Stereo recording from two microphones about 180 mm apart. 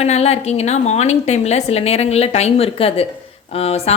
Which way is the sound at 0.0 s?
35° left (ahead or behind).